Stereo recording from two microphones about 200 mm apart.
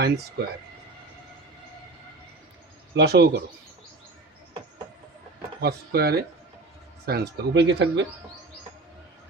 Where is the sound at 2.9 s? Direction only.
55° right (ahead or behind).